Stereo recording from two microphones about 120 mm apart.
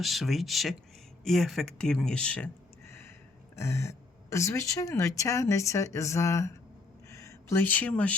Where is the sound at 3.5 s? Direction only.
25° left (ahead or behind).